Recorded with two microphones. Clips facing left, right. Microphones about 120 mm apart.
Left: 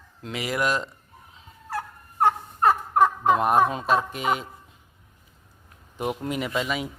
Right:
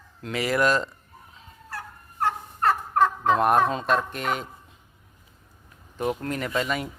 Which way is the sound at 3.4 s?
5° left (ahead or behind).